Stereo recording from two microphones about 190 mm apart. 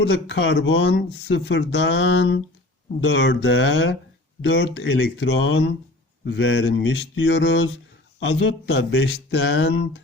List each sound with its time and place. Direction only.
0.0 s speech: 70° left (ahead or behind); by 5.7 s 85° left
6.2 s speech: 70° left (ahead or behind)